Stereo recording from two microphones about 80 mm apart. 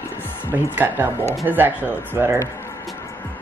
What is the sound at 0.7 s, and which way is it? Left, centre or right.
Speech, right.